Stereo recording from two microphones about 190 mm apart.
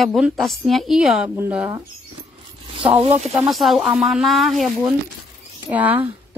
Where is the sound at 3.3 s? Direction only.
Centre (ahead or behind).